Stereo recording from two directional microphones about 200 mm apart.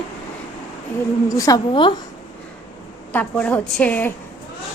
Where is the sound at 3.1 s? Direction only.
5° left (ahead or behind).